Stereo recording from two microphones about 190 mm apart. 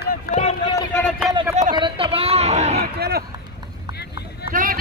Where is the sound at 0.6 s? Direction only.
20° left (ahead or behind).